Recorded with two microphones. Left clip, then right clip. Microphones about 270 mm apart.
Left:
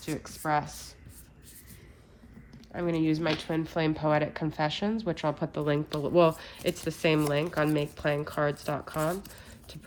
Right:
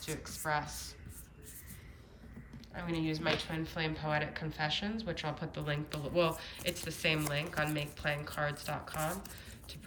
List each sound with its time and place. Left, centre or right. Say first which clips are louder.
0.0 s speech: left 5 dB; left
2.7 s speech: left 9 dB; left